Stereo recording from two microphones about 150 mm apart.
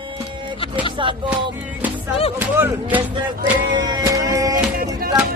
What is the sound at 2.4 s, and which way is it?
Speech, 15° right (ahead or behind).